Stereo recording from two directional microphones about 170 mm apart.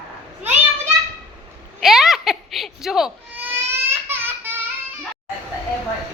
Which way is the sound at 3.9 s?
15° right (ahead or behind).